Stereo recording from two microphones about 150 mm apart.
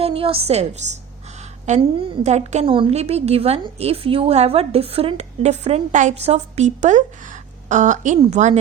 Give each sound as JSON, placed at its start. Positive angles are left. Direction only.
{"t": 0.0, "sound": "a woman's voice", "side_deg": -40}